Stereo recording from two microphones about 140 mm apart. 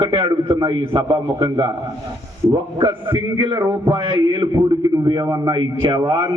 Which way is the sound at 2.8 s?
40° right (ahead or behind).